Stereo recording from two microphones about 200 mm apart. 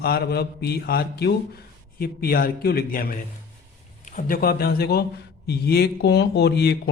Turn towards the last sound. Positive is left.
turn(degrees=55)  # may be behind; listen again after turning